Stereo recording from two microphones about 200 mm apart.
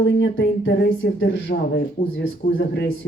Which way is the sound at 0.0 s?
65° left (ahead or behind).